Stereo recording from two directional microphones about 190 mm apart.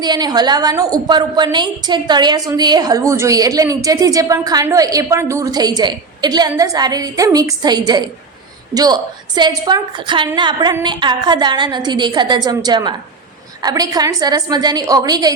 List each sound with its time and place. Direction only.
0.0 s a woman's voice: 20° right (ahead or behind)